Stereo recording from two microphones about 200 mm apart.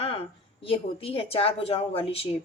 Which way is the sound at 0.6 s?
25° left (ahead or behind).